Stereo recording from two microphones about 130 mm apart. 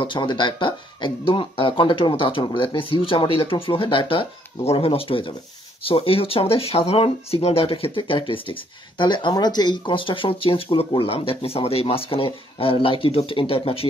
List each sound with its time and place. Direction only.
0.0 s speech: 40° left (ahead or behind)